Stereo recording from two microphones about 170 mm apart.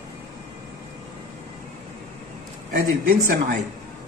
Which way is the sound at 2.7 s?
55° right (ahead or behind).